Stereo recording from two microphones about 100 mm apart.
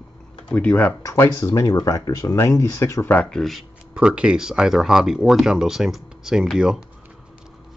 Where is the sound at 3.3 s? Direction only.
Centre (ahead or behind).